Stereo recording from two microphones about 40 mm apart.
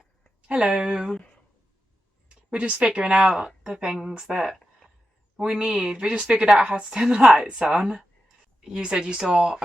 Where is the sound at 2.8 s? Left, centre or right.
Right.